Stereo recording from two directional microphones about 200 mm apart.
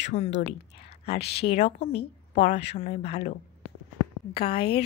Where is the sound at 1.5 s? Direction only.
30° left (ahead or behind).